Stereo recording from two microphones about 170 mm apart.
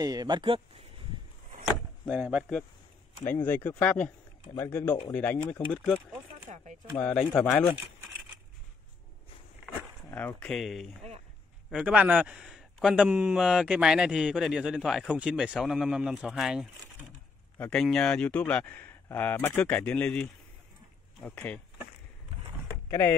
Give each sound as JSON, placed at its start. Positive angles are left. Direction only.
{"t": 0.0, "sound": "speech", "side_deg": -20}
{"t": 2.0, "sound": "speech", "side_deg": -5}
{"t": 3.4, "sound": "speech", "side_deg": 10}
{"t": 6.5, "sound": "speech", "side_deg": -45}
{"t": 6.9, "sound": "speech", "side_deg": 5}
{"t": 10.1, "sound": "a man's voice", "side_deg": 10}
{"t": 17.1, "sound": "speech", "side_deg": 10}
{"t": 22.8, "sound": "speech", "side_deg": 15}